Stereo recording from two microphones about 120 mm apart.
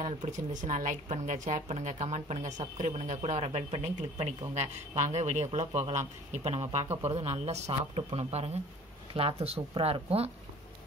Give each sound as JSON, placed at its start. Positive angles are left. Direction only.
{"t": 0.2, "sound": "a woman's voice", "side_deg": -90}